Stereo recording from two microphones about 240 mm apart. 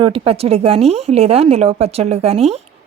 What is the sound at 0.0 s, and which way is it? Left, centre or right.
Speech, right.